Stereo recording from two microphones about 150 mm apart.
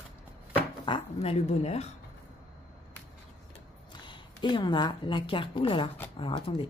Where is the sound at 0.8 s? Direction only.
40° left (ahead or behind).